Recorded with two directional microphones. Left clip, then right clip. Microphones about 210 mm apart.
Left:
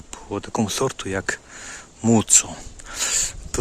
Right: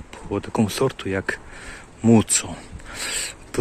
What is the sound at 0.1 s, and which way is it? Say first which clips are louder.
Speech: right 1 dB; 10° left (ahead or behind).